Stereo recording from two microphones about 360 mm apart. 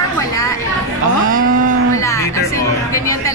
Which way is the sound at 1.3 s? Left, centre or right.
Right.